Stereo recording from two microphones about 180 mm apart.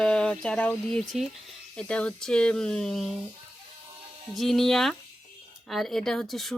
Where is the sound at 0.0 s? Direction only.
5° left (ahead or behind).